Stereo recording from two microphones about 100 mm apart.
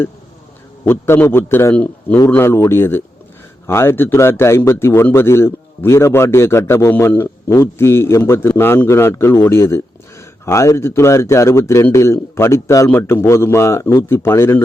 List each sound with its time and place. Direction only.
0.9 s a man's voice: 25° left (ahead or behind)
2.1 s speech: 25° left (ahead or behind)